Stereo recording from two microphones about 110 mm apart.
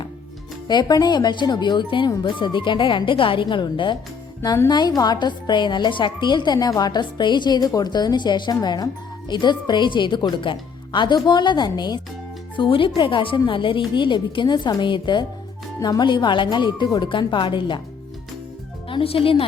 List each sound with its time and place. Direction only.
0.7 s a woman's voice: 40° left (ahead or behind)
18.9 s speech: 55° left (ahead or behind)